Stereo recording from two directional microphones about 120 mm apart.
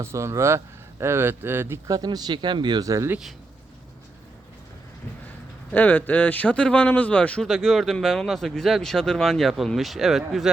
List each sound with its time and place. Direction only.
0.0 s speech: 25° right (ahead or behind)
1.9 s speech: 35° right (ahead or behind)
5.7 s speech: 15° left (ahead or behind)
7.4 s speech: centre (ahead or behind)